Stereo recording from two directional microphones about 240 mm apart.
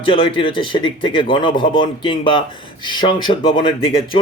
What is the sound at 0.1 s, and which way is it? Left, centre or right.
Speech, left.